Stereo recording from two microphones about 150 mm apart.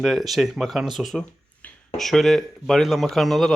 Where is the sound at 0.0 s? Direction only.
Centre (ahead or behind).